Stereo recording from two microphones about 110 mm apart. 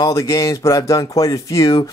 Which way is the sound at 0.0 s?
30° left (ahead or behind).